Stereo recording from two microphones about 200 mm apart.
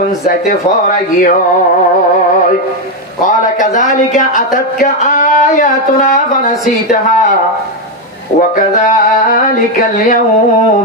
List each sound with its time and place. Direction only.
0.3 s speech: 40° left (ahead or behind)
3.3 s speech: 40° left (ahead or behind)
8.4 s speech: 45° left (ahead or behind)